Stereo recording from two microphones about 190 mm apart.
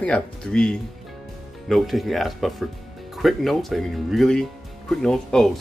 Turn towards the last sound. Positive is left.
turn(degrees=0)  # may be behind; listen again after turning